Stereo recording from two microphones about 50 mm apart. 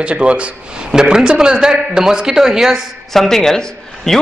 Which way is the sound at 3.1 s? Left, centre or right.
Centre.